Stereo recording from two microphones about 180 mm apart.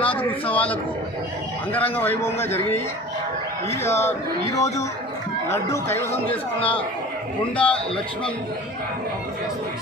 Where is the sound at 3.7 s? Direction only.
15° left (ahead or behind).